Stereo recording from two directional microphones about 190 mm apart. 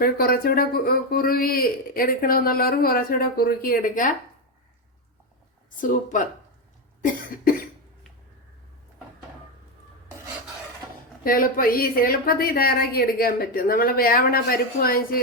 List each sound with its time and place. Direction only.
0.0 s speech: 50° left (ahead or behind)
5.7 s speech: 45° left (ahead or behind)
11.2 s speech: 50° left (ahead or behind)